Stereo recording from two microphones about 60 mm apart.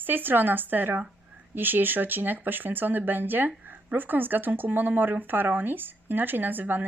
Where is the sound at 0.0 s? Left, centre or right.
Right.